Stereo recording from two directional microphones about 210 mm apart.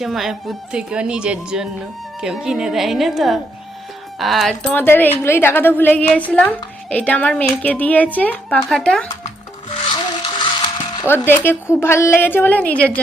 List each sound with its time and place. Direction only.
0.0 s a woman's voice: centre (ahead or behind)
9.2 s music: 25° left (ahead or behind)
11.1 s a woman's voice: 10° left (ahead or behind)